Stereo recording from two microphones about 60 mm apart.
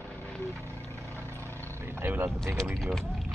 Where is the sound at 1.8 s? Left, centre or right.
Right.